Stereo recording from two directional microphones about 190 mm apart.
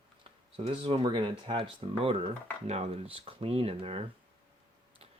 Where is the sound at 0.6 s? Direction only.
25° right (ahead or behind).